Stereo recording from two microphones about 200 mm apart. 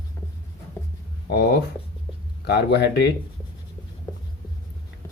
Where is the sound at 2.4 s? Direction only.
55° left (ahead or behind).